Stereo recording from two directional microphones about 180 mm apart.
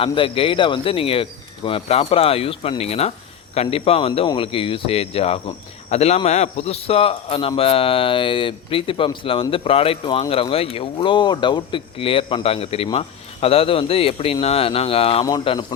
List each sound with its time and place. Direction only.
0.0 s speech: 30° left (ahead or behind)
15.2 s speech: 20° left (ahead or behind)